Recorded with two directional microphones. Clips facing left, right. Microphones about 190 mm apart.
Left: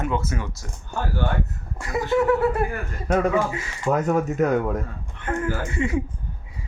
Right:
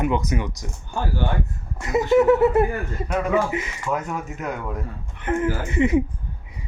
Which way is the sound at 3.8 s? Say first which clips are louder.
Left 9 dB; 40° left (ahead or behind).